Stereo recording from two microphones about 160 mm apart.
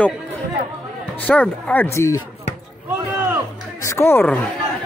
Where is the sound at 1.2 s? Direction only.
5° left (ahead or behind).